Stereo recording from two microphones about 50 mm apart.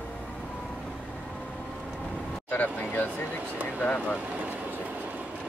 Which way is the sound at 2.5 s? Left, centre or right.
Left.